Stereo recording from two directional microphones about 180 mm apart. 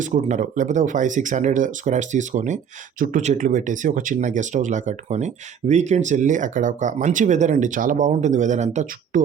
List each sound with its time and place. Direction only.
0.0 s speech: 45° right (ahead or behind)